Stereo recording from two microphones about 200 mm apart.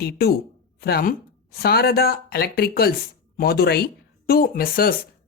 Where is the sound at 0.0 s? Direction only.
50° left (ahead or behind).